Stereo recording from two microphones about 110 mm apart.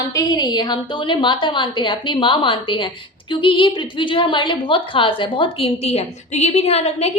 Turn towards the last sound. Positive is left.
turn(degrees=70)  # may be behind; listen again after turning